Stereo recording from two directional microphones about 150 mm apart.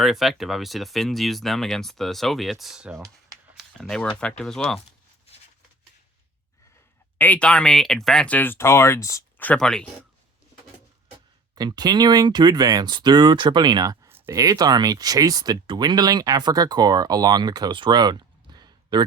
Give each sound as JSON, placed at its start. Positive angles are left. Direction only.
{"t": 0.0, "sound": "speech", "side_deg": 0}
{"t": 7.2, "sound": "speech", "side_deg": 10}
{"t": 9.5, "sound": "speech", "side_deg": 5}
{"t": 11.5, "sound": "speech", "side_deg": -25}